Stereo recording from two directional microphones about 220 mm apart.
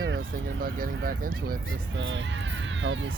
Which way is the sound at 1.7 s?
60° right (ahead or behind).